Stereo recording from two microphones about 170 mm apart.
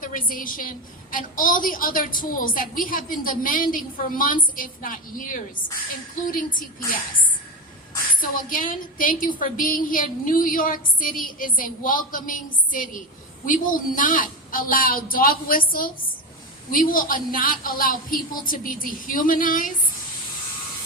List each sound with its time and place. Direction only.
0.0 s a woman's voice: 50° left (ahead or behind)
8.1 s a woman's voice: 55° left (ahead or behind)